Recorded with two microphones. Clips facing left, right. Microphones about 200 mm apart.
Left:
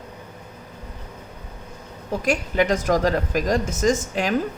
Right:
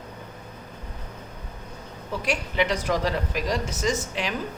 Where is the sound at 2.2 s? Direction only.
45° left (ahead or behind).